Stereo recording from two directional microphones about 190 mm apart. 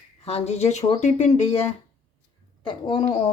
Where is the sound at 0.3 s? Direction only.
35° left (ahead or behind).